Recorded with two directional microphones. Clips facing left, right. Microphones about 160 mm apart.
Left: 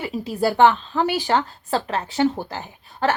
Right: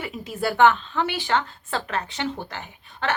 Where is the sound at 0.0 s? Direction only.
35° left (ahead or behind).